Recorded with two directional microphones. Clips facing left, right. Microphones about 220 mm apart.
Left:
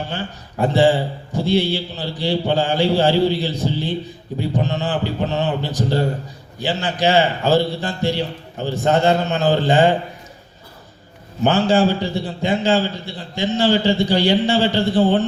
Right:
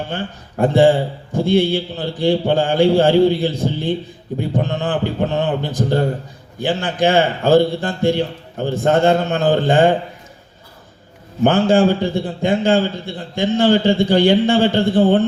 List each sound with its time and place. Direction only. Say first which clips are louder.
0.1 s a man's voice: right 2 dB; 50° right (ahead or behind)
11.4 s a man's voice: right 3 dB; 55° right (ahead or behind)